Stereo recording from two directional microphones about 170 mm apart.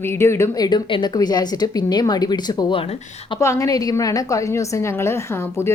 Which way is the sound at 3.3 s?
15° left (ahead or behind).